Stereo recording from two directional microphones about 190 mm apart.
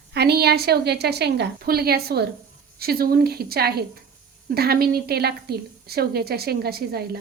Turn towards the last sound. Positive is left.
turn(degrees=-55)  # may be behind; listen again after turning